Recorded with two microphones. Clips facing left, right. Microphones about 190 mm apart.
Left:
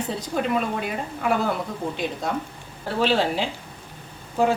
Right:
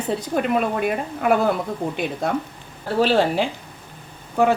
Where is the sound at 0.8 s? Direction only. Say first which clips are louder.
Right 5 dB; 60° right (ahead or behind).